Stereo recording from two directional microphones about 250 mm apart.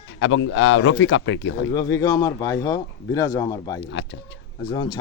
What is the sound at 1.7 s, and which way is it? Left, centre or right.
Speech, centre.